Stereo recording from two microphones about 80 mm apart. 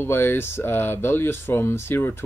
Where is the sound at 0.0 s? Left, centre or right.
Left.